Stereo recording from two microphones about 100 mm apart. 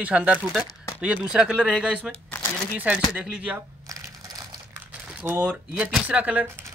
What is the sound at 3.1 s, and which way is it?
Speech, 15° right (ahead or behind).